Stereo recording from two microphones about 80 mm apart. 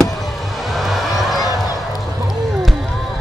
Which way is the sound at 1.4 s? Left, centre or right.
Left.